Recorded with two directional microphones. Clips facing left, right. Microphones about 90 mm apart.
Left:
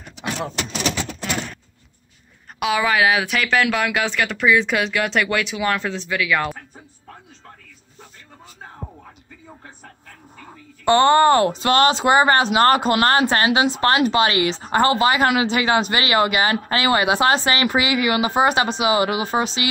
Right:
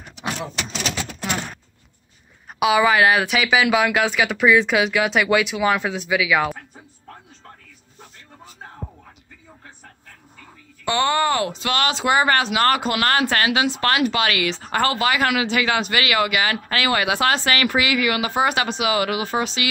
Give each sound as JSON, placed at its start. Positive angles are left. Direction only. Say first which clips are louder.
{"t": 2.6, "sound": "speech", "louder": "right 2 dB", "side_deg": 0}
{"t": 10.4, "sound": "a woman's voice", "louder": "left 6 dB", "side_deg": 40}